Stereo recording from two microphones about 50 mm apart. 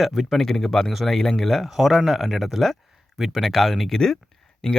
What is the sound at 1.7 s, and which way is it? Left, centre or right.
Speech, centre.